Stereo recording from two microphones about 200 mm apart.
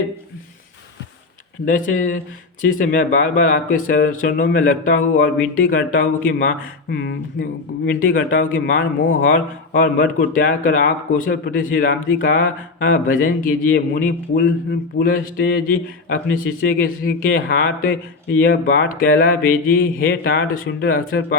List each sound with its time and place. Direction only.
1.6 s speech: 40° left (ahead or behind)
16.6 s speech: 45° left (ahead or behind)